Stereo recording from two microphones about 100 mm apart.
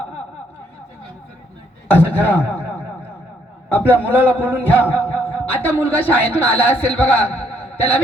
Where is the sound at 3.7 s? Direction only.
15° left (ahead or behind).